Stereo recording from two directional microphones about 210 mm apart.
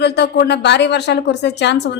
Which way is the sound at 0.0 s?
50° left (ahead or behind).